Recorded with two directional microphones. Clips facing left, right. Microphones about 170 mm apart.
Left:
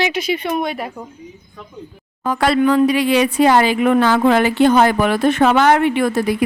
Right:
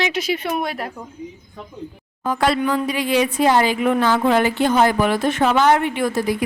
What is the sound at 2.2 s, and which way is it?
Speech, 70° left (ahead or behind).